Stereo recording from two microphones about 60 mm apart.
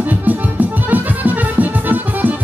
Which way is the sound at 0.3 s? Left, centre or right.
Right.